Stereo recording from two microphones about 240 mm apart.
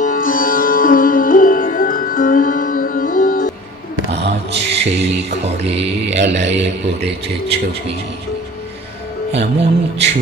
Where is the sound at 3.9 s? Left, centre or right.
Right.